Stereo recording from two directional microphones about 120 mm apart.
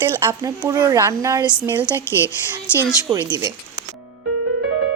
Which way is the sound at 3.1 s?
35° right (ahead or behind).